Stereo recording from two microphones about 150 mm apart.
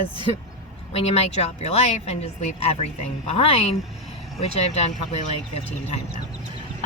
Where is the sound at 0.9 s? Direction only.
45° left (ahead or behind).